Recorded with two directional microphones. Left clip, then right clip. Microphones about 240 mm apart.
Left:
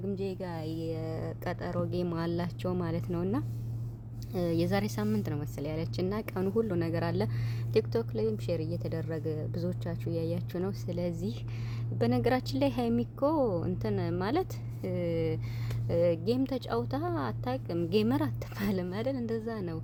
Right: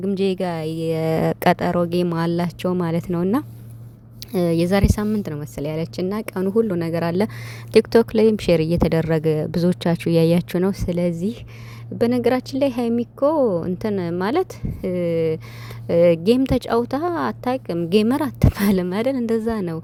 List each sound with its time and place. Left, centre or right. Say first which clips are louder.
0.0 s a woman's voice: right 14 dB; right